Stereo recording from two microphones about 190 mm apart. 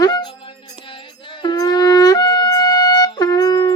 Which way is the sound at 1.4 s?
20° left (ahead or behind).